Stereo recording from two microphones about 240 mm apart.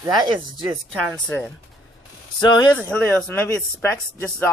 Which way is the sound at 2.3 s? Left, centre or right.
Centre.